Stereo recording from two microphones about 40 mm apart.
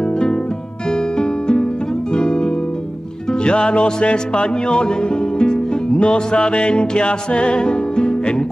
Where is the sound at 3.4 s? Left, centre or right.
Left.